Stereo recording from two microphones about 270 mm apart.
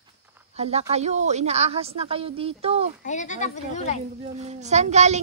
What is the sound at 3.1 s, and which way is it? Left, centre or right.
Speech, left.